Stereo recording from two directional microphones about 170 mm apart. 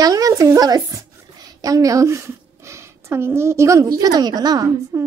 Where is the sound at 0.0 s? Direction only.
20° right (ahead or behind).